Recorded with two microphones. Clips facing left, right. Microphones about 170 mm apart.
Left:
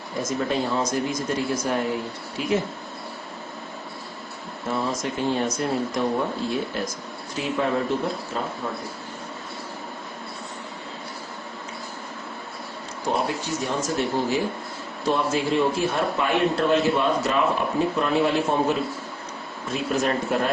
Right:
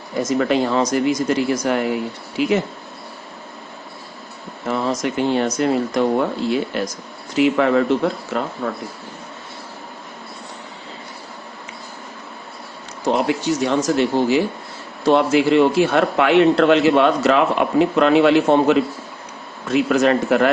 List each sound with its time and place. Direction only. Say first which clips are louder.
0.2 s speech: right 7 dB; 75° right (ahead or behind)
4.7 s speech: right 5 dB; 80° right
8.6 s speech: right 6 dB; 65° right (ahead or behind)
13.1 s a man's voice: right 7 dB; 80° right